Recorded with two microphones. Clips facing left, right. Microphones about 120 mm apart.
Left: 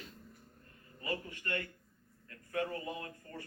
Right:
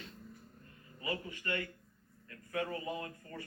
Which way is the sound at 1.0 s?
45° left (ahead or behind).